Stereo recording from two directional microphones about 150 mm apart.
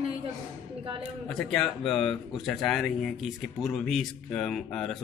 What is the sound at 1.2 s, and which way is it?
Speech, 5° left (ahead or behind).